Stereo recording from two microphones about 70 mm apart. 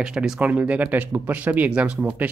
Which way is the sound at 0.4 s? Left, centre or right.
Right.